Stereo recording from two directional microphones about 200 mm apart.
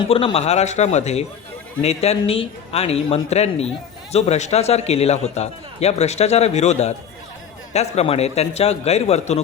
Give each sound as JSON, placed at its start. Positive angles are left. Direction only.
{"t": 0.1, "sound": "a man's voice", "side_deg": 30}